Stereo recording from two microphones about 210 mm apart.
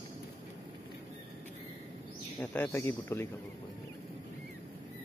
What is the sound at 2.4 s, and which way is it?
Speech, 5° left (ahead or behind).